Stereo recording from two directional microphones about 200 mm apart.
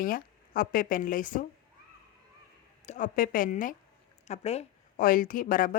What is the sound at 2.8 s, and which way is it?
Speech, 40° left (ahead or behind).